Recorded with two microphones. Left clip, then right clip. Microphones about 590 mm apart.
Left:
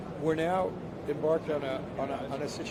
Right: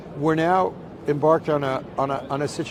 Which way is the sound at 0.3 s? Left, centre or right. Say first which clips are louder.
Right 9 dB; right.